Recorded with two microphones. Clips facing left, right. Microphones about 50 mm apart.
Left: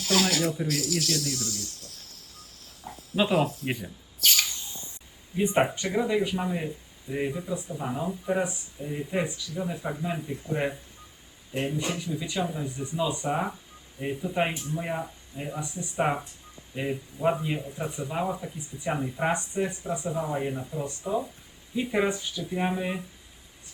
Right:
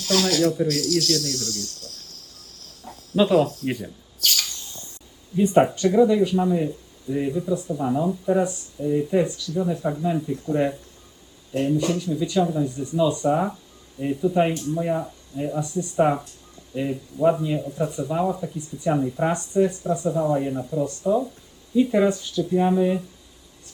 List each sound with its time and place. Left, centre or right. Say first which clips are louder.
0.0 s speech: right 5 dB; centre
4.2 s a sound: even; centre
5.4 s speech: right 7 dB; left